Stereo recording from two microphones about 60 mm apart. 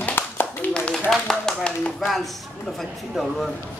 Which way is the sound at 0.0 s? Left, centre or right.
Left.